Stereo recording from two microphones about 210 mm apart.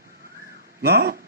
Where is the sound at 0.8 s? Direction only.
50° right (ahead or behind).